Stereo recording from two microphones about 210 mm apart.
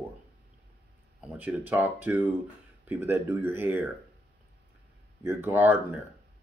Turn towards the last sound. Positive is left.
turn(degrees=-10)  # may be behind; listen again after turning